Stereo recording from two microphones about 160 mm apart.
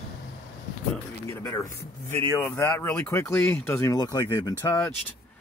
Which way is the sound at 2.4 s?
15° left (ahead or behind).